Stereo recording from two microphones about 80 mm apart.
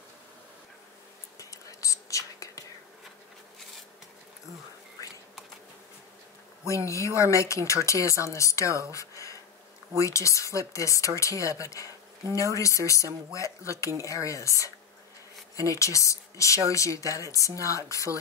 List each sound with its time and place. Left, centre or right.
1.4 s whispering: left
6.6 s speech: left
8.9 s a sound: left
9.9 s speech: left